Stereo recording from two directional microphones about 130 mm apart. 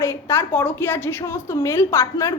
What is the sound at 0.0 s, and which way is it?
A woman's voice, 20° left (ahead or behind).